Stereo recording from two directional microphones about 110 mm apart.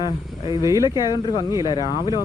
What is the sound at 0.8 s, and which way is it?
Speech, 35° left (ahead or behind).